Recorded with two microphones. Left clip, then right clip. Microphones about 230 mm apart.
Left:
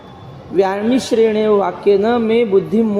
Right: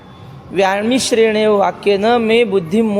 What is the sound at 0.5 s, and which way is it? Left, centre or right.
A man's voice, right.